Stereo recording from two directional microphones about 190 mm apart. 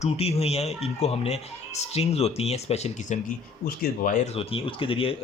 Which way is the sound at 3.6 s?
50° left (ahead or behind).